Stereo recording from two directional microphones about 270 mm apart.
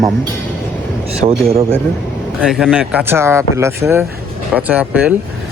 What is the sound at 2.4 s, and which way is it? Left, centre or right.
A man's voice, centre.